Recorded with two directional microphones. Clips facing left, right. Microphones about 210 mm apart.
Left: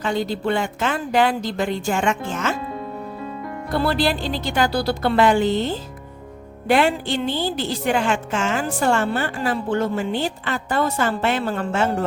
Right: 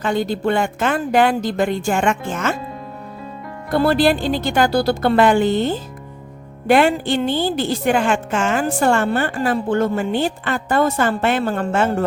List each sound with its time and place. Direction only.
0.0 s a woman's voice: 50° right (ahead or behind)
3.7 s a woman's voice: 50° right (ahead or behind)